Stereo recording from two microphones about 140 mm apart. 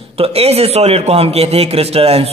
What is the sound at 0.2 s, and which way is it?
A man's voice, 45° right (ahead or behind).